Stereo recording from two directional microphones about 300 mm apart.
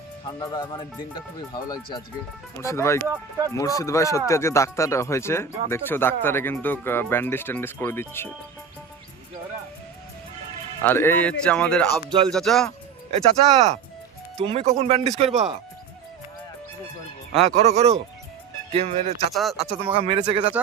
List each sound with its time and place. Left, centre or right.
0.3 s speech: centre
3.1 s speech: centre
3.5 s speech: centre
10.8 s speech: centre
11.9 s speech: centre
12.3 s speech: centre
13.1 s speech: right
17.5 s speech: right
19.3 s speech: centre
19.9 s speech: centre